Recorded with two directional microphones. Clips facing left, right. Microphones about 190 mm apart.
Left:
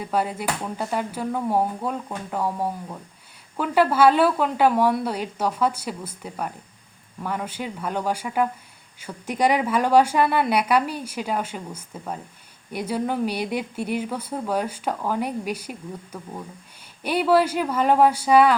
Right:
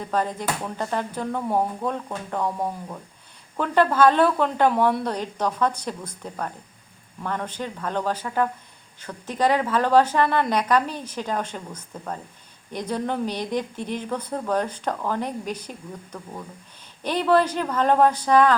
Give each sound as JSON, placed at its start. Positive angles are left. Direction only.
{"t": 0.0, "sound": "a woman's voice", "side_deg": 10}
{"t": 17.0, "sound": "a woman's voice", "side_deg": 10}